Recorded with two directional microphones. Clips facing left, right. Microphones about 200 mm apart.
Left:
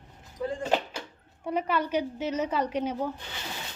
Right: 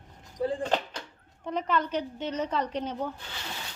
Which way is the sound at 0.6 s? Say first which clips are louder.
Left 1 dB; 10° left (ahead or behind).